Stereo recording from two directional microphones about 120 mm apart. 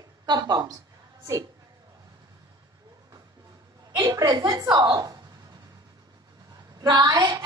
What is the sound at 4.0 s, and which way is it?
A woman's voice, 30° right (ahead or behind).